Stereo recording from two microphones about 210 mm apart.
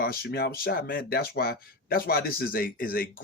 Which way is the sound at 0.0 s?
45° left (ahead or behind).